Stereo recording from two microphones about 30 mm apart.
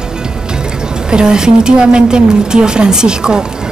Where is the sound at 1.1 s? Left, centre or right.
Right.